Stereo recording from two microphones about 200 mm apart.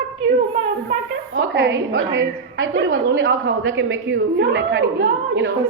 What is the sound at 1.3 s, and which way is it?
A woman's voice, 70° right (ahead or behind).